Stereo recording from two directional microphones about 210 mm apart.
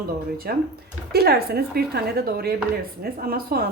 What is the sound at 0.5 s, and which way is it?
Speech, 45° right (ahead or behind).